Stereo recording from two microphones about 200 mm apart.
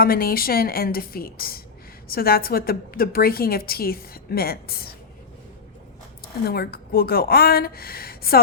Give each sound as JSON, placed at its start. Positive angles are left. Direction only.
{"t": 0.0, "sound": "a woman's voice", "side_deg": 50}
{"t": 6.4, "sound": "a woman's voice", "side_deg": 50}